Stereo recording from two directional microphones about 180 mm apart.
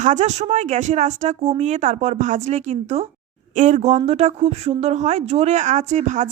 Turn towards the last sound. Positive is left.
turn(degrees=-40)  # may be behind; listen again after turning